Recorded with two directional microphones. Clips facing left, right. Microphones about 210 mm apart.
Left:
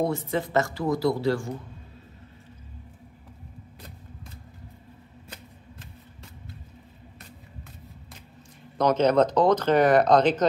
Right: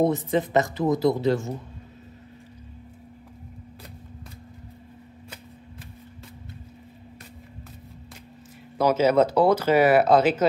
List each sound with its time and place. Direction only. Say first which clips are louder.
0.3 s speech: right 3 dB; 20° right (ahead or behind)
8.7 s speech: right 1 dB; 5° right (ahead or behind)